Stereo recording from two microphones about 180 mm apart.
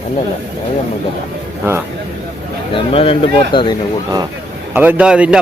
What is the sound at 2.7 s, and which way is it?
Speech, 30° left (ahead or behind).